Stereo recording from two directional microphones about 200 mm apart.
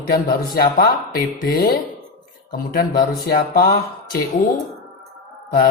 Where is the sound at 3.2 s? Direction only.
50° left (ahead or behind).